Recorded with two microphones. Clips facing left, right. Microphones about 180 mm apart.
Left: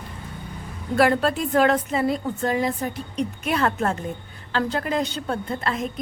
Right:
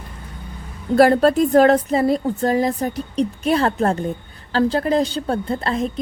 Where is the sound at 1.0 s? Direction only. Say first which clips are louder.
Right 6 dB; 40° right (ahead or behind).